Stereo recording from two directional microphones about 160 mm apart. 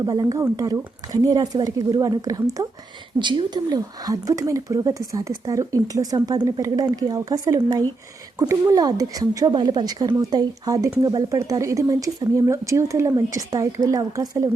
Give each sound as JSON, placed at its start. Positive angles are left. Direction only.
{"t": 0.0, "sound": "speech", "side_deg": -20}